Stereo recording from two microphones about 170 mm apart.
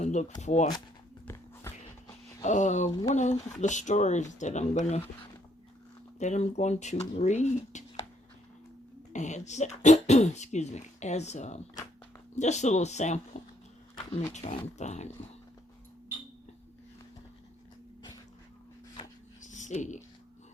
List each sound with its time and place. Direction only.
0.0 s speech: 45° left (ahead or behind)
1.2 s walk: 15° left (ahead or behind)
2.4 s speech: 45° left (ahead or behind)
6.1 s speech: 45° left (ahead or behind)
9.1 s speech: 45° left (ahead or behind)
13.3 s a sound: 45° left (ahead or behind)
13.9 s roaring cats: 30° left (ahead or behind)
14.8 s speech: 40° left (ahead or behind)
19.4 s a sound: 45° left (ahead or behind)